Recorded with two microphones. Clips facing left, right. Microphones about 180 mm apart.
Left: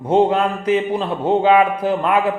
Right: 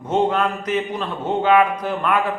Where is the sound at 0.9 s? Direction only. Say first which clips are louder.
Left 6 dB; 30° left (ahead or behind).